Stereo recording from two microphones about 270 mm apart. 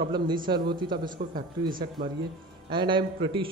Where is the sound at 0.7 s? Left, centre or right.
Centre.